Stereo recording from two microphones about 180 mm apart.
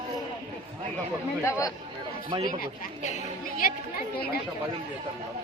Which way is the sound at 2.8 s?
45° left (ahead or behind).